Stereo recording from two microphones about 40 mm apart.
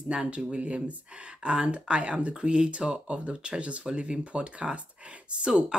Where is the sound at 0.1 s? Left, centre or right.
Right.